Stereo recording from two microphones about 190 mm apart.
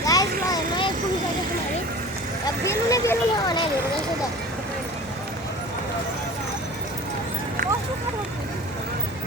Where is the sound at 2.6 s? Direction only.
15° left (ahead or behind).